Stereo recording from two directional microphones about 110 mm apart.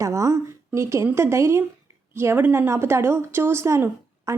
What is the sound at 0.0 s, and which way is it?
A woman's voice, 30° right (ahead or behind).